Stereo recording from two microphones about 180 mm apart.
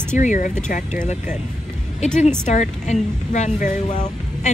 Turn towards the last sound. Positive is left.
turn(degrees=45)  # may be behind; listen again after turning